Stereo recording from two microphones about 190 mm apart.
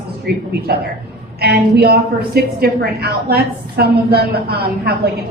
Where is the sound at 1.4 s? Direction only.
60° right (ahead or behind).